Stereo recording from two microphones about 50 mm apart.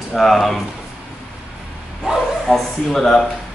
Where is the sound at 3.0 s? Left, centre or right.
Centre.